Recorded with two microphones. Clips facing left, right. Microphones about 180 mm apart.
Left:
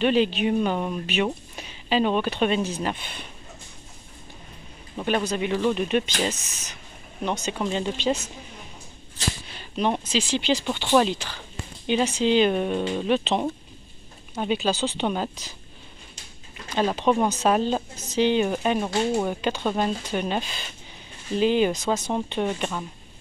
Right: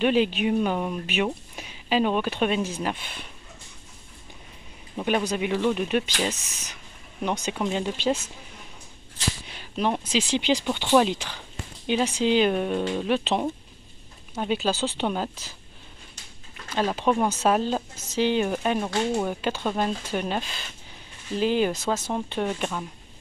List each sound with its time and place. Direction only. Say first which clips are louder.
0.0 s speech: left 1 dB; 10° right (ahead or behind)
4.9 s speech: even; 10° right (ahead or behind)
9.5 s a sound: left 1 dB; 10° right (ahead or behind)
10.1 s speech: even; 20° right (ahead or behind); by 13.1 s centre (ahead or behind)
13.1 s speech: left 2 dB; 10° right (ahead or behind)
15.2 s speech: left 1 dB; 15° left (ahead or behind)
16.7 s speech: left 2 dB; 5° right (ahead or behind)